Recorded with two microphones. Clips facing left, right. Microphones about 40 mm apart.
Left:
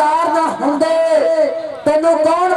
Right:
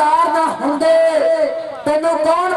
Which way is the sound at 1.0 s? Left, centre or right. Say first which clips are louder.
Left 1 dB; centre.